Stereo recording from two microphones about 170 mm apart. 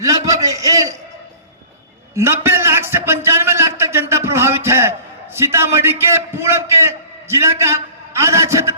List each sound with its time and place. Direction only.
0.0 s a man's voice: 20° right (ahead or behind)
2.1 s a man's voice: 15° right (ahead or behind)